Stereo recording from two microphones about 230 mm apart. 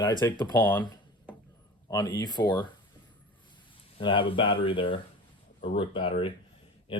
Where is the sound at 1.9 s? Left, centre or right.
Centre.